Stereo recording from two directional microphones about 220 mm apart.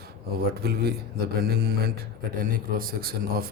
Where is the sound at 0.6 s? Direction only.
45° right (ahead or behind).